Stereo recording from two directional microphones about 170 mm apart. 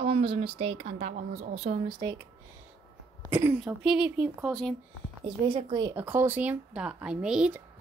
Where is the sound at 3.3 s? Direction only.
15° right (ahead or behind).